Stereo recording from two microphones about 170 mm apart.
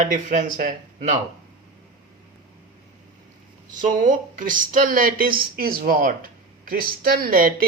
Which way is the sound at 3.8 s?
50° right (ahead or behind).